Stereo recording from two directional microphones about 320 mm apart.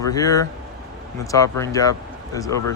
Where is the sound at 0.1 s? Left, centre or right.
Centre.